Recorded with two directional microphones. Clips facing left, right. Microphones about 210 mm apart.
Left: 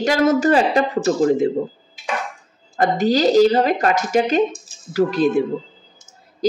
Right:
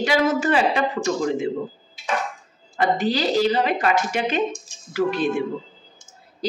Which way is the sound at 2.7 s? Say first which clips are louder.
Left 4 dB; 40° left (ahead or behind).